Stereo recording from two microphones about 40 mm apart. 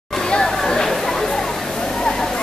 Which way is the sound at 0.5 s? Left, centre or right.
Centre.